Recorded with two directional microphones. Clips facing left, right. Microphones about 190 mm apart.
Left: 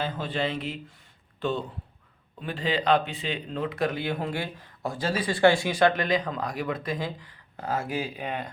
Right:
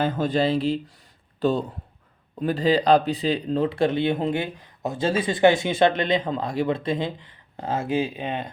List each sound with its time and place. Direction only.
0.0 s speech: 45° right (ahead or behind); by 8.4 s 25° right (ahead or behind)